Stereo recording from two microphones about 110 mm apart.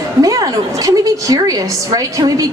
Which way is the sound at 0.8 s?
30° right (ahead or behind).